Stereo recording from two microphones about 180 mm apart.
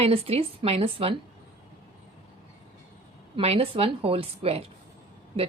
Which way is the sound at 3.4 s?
35° right (ahead or behind).